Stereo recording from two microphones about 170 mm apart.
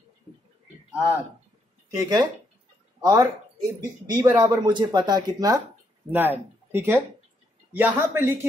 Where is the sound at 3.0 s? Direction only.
25° right (ahead or behind).